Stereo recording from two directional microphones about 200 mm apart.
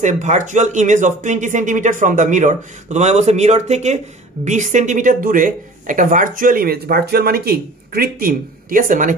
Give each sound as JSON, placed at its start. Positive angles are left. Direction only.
{"t": 0.0, "sound": "speech", "side_deg": -35}